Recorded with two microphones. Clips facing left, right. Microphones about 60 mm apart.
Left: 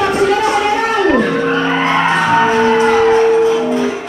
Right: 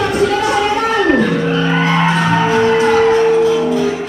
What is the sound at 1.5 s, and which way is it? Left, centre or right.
Music, left.